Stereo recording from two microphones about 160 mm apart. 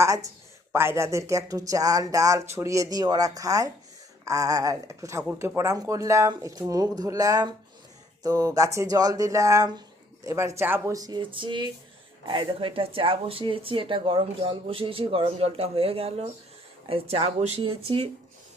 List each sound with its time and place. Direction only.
0.0 s a woman's voice: 20° right (ahead or behind)